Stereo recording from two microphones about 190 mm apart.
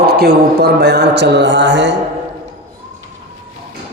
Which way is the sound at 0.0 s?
55° right (ahead or behind).